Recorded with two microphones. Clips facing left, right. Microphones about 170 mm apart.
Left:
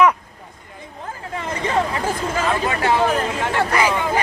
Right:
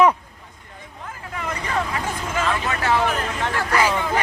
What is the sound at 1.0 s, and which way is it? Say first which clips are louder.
Hubbub: left 2 dB; 30° left (ahead or behind).